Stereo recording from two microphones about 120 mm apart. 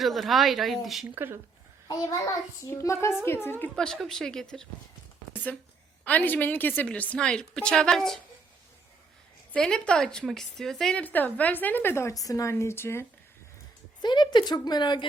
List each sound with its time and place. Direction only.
0.0 s a woman's voice: centre (ahead or behind)
1.0 s speech: 15° right (ahead or behind)
1.9 s a woman's voice: 30° left (ahead or behind)
3.8 s a woman's voice: 5° left (ahead or behind)
6.1 s a woman's voice: 15° left (ahead or behind)
9.5 s a woman's voice: 5° left (ahead or behind)
11.0 s a woman's voice: 15° left (ahead or behind)
14.0 s speech: 40° left (ahead or behind)